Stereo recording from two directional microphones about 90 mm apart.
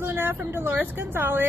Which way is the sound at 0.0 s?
25° right (ahead or behind).